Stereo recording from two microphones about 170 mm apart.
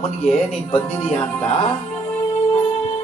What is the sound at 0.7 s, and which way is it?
Speech, 30° left (ahead or behind).